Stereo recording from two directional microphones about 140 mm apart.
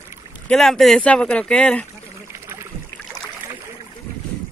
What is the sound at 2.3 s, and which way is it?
Boat, 20° right (ahead or behind).